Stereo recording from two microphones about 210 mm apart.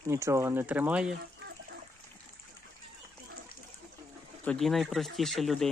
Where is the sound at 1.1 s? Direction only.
55° right (ahead or behind).